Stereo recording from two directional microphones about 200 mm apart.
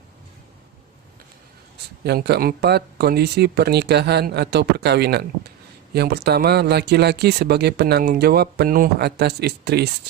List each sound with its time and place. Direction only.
2.0 s speech: 55° right (ahead or behind)